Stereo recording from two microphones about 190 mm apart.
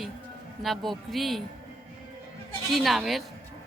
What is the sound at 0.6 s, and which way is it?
Speech, centre (ahead or behind).